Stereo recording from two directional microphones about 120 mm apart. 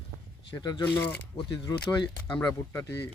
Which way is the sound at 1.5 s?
35° left (ahead or behind).